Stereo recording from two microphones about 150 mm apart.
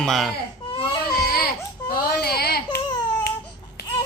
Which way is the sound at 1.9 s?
90° left.